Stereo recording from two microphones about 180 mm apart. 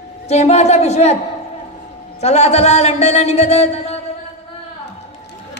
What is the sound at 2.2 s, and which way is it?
Speech, 35° left (ahead or behind).